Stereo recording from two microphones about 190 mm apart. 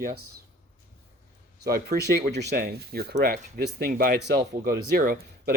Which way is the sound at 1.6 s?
55° right (ahead or behind).